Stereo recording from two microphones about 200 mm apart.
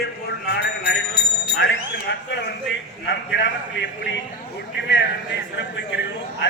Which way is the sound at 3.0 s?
55° left (ahead or behind).